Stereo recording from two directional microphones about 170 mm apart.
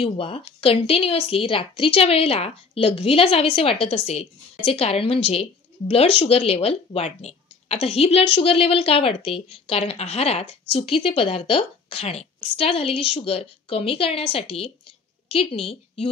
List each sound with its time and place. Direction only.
0.0 s a woman's voice: 35° left (ahead or behind)